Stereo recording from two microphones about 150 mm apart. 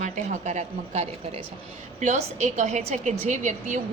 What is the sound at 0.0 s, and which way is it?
A woman's voice, 50° right (ahead or behind).